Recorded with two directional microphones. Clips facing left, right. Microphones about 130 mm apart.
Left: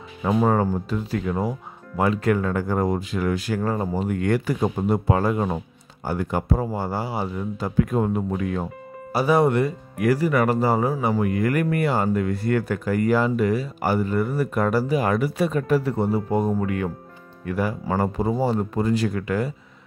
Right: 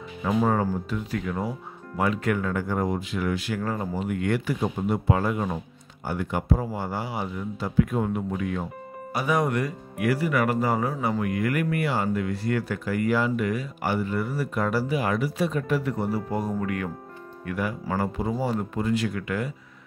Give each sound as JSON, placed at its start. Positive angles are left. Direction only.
{"t": 0.2, "sound": "speech", "side_deg": 40}
{"t": 10.0, "sound": "speech", "side_deg": 40}
{"t": 15.7, "sound": "speech", "side_deg": 30}